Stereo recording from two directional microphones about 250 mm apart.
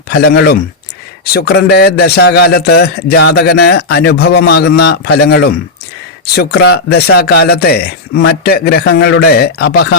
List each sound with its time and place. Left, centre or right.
0.1 s a man's voice: left